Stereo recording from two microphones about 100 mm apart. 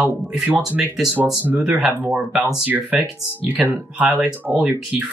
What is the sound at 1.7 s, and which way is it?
Speech, centre (ahead or behind).